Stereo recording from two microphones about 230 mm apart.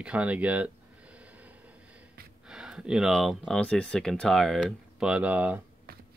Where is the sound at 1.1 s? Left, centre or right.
Centre.